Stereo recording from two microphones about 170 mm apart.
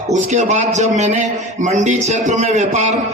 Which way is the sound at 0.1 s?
45° right (ahead or behind).